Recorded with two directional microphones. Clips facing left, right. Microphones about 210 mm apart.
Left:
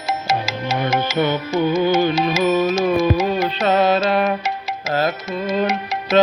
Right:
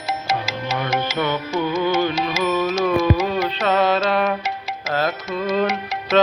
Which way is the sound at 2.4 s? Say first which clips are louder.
Left 2 dB; 25° left (ahead or behind).